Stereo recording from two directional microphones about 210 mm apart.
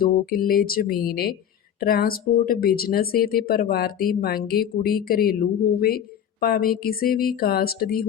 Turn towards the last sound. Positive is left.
turn(degrees=45)  # may be behind; listen again after turning